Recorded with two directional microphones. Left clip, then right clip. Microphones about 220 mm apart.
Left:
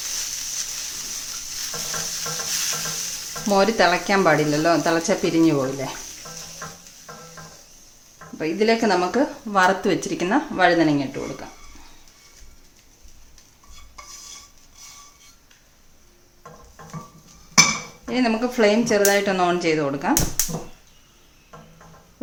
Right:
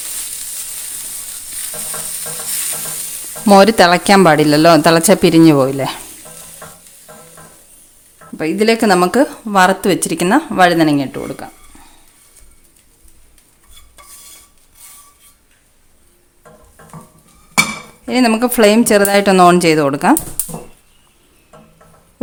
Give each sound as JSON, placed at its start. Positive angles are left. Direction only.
{"t": 3.5, "sound": "speech", "side_deg": -50}
{"t": 8.4, "sound": "speech", "side_deg": -50}
{"t": 18.1, "sound": "speech", "side_deg": -50}